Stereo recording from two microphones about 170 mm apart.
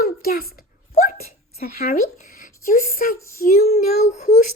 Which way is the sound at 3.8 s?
40° left (ahead or behind).